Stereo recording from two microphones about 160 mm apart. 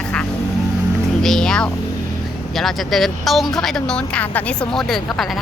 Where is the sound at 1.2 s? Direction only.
5° left (ahead or behind).